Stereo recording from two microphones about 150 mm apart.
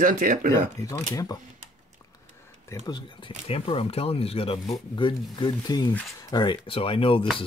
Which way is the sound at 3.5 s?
40° left (ahead or behind).